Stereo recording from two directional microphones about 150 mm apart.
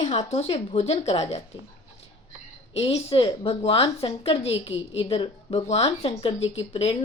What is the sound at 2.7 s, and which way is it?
A woman's voice, 40° left (ahead or behind).